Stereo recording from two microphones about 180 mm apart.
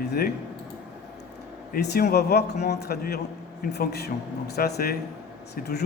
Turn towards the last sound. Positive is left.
turn(degrees=65)  # may be behind; listen again after turning